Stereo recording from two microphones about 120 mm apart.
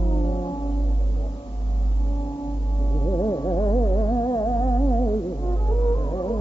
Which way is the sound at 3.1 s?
30° left (ahead or behind).